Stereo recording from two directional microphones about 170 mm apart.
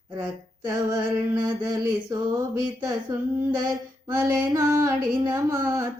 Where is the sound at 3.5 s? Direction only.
25° right (ahead or behind).